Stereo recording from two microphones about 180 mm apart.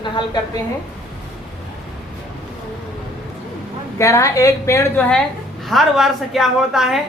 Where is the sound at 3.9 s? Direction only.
15° left (ahead or behind).